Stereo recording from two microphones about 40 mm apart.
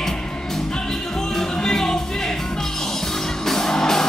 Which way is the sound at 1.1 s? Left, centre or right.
Centre.